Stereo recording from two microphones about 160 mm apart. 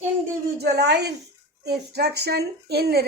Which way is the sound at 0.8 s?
90° right.